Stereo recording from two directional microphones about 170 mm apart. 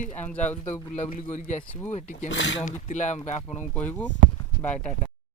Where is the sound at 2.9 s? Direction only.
45° left (ahead or behind).